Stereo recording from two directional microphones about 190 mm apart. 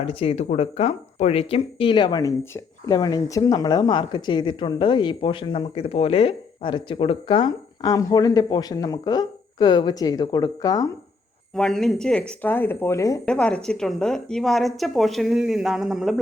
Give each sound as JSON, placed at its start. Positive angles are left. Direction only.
{"t": 0.0, "sound": "speech", "side_deg": 30}
{"t": 11.5, "sound": "speech", "side_deg": 5}
{"t": 13.2, "sound": "a woman's voice", "side_deg": 5}